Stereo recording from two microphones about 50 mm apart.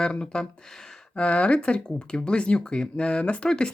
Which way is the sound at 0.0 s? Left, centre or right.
Centre.